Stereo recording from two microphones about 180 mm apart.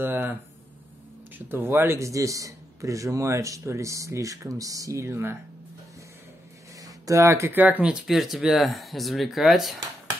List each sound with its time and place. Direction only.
0.0 s a man's voice: 10° right (ahead or behind)
1.5 s a man's voice: 10° right (ahead or behind)
6.8 s speech: 15° right (ahead or behind); by 9.8 s centre (ahead or behind)